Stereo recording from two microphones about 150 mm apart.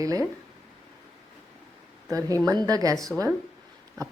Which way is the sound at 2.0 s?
20° right (ahead or behind).